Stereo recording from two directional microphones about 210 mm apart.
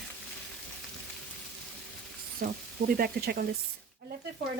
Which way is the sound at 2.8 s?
45° right (ahead or behind).